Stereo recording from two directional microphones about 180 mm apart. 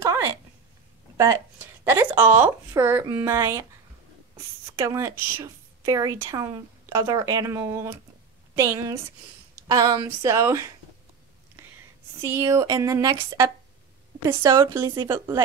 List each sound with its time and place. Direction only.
0.0 s a sound: 15° right (ahead or behind)
1.1 s a woman's voice: 15° right (ahead or behind)
4.7 s a woman's voice: 15° right (ahead or behind)
12.2 s a woman's voice: 15° right (ahead or behind)